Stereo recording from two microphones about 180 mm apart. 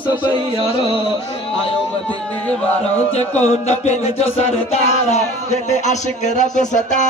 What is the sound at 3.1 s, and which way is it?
A man's voice, 40° left (ahead or behind).